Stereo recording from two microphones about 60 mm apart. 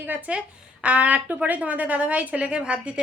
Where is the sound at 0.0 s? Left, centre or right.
Right.